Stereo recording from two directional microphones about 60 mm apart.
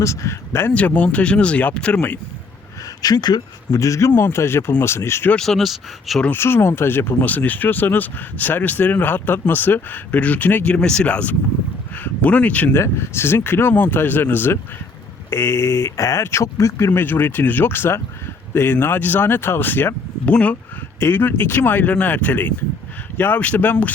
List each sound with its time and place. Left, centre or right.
0.0 s speech: left
0.7 s speech: left
3.0 s speech: left
3.7 s speech: left
4.1 s speech: left
5.4 s speech: centre
6.3 s speech: left
10.8 s speech: centre
12.7 s speech: left
20.2 s speech: left
21.0 s speech: left